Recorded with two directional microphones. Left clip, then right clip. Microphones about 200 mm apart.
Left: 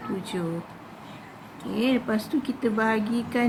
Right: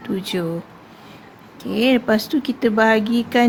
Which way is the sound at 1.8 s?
50° right (ahead or behind).